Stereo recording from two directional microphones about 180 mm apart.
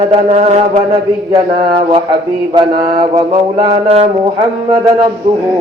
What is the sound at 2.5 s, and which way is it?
Mantra, 25° right (ahead or behind).